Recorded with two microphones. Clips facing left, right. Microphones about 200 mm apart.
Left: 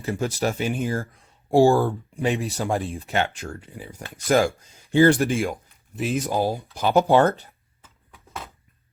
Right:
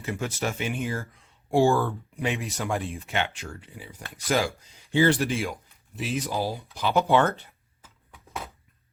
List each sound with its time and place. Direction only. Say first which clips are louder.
0.0 s speech: left 5 dB; 35° left (ahead or behind)